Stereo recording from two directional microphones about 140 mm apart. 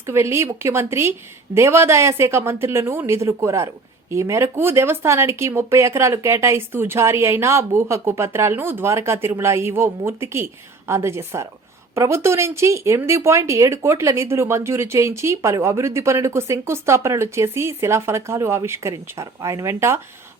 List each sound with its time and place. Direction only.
0.0 s speech: 20° right (ahead or behind)